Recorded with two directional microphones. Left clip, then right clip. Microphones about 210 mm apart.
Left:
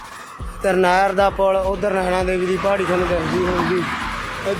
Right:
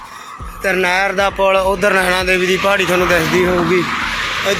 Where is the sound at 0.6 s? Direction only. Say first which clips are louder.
Right 1 dB; 20° left (ahead or behind); by 2.8 s centre (ahead or behind).